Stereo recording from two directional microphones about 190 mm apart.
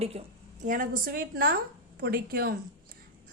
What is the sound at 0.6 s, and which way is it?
A woman's voice, 45° right (ahead or behind).